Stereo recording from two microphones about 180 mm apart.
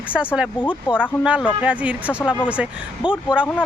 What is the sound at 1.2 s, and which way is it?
Speech, 5° right (ahead or behind).